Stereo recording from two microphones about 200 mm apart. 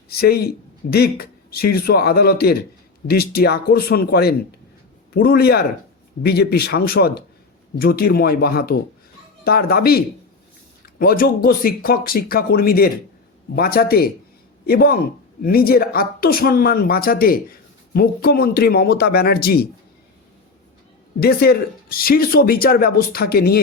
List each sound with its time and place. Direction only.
0.1 s speech: 50° left (ahead or behind)
11.0 s speech: 45° left (ahead or behind)
21.2 s speech: 50° left (ahead or behind)